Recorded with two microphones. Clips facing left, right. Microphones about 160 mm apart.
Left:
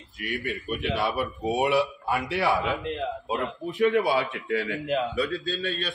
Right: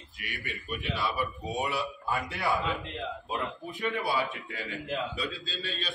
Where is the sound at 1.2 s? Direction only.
70° left (ahead or behind).